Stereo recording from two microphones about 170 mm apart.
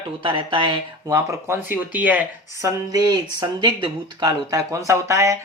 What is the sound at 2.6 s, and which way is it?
Speech, 20° right (ahead or behind).